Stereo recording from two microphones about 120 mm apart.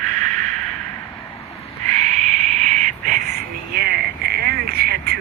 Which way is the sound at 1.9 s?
80° right.